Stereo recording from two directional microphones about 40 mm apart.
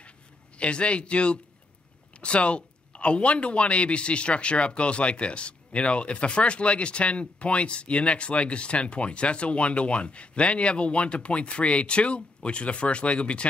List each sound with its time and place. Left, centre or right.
0.6 s speech: left